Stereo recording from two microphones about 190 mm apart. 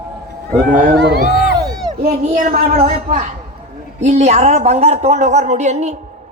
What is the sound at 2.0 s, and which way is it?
Speech, 35° right (ahead or behind).